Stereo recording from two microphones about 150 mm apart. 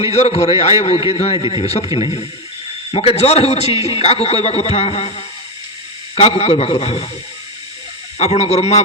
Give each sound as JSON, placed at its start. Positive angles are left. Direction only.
{"t": 0.0, "sound": "a man's voice", "side_deg": 45}
{"t": 2.9, "sound": "a man's voice", "side_deg": 40}
{"t": 8.2, "sound": "a man's voice", "side_deg": 45}